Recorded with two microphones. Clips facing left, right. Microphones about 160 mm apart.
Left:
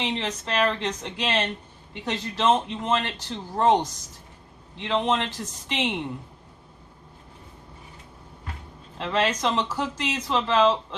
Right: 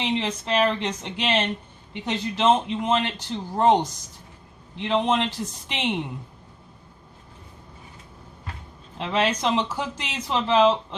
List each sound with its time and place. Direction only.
0.0 s speech: 15° right (ahead or behind)
4.8 s speech: 15° right (ahead or behind)
9.0 s speech: 20° right (ahead or behind)